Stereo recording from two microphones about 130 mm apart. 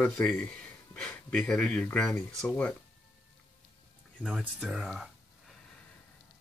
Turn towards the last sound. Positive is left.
turn(degrees=-5)  # may be behind; listen again after turning